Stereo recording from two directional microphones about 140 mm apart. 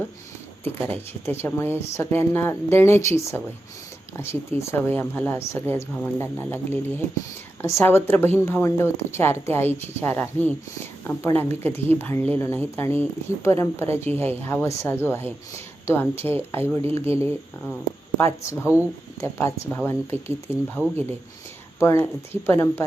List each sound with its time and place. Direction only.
0.6 s a woman's voice: 15° left (ahead or behind)